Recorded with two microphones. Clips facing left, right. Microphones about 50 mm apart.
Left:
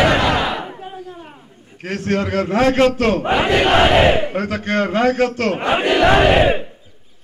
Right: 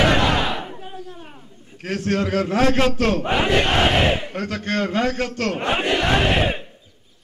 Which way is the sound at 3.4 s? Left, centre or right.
Left.